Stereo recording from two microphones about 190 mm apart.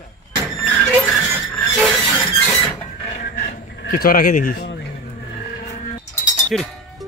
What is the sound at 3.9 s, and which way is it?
Speech, 50° left (ahead or behind).